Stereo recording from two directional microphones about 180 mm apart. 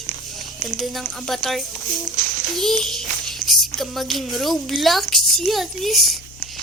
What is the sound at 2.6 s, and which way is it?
A woman's voice, centre (ahead or behind).